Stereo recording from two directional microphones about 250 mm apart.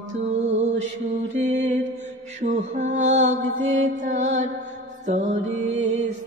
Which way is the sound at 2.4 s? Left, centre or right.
Right.